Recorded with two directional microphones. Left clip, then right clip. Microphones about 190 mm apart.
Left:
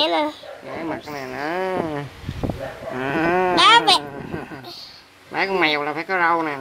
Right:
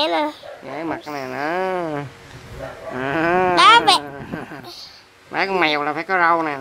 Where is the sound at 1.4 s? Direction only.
Centre (ahead or behind).